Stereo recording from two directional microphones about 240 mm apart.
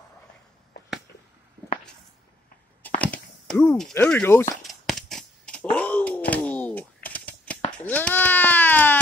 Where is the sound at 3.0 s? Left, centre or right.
Centre.